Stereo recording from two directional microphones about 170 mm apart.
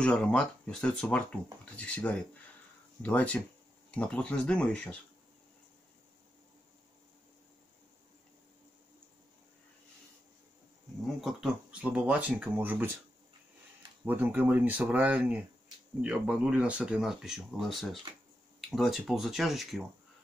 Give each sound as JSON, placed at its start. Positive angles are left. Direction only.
{"t": 0.0, "sound": "speech", "side_deg": 5}
{"t": 11.1, "sound": "speech", "side_deg": -5}
{"t": 14.0, "sound": "speech", "side_deg": -10}
{"t": 18.1, "sound": "speech", "side_deg": -30}
{"t": 18.7, "sound": "speech", "side_deg": 0}